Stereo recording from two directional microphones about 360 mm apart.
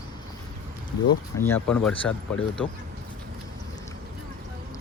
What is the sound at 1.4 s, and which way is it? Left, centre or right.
Speech, centre.